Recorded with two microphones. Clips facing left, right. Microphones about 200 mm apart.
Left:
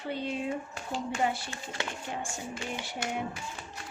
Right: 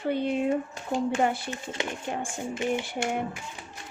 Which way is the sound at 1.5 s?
20° right (ahead or behind).